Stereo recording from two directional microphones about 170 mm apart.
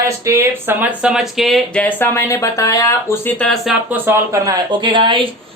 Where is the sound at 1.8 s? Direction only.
10° left (ahead or behind).